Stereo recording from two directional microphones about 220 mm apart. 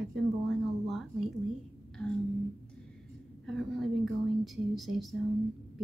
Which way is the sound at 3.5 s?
Centre (ahead or behind).